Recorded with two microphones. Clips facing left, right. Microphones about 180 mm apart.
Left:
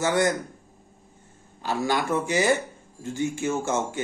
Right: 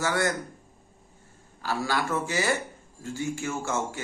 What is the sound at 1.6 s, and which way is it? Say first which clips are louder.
Speech: left 3 dB; 20° left (ahead or behind).